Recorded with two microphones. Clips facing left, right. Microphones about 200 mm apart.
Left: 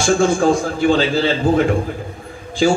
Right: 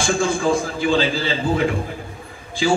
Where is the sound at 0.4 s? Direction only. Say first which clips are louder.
Left 4 dB; 55° left (ahead or behind).